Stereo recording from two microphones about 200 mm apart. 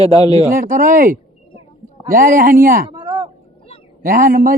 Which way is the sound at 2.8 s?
25° right (ahead or behind).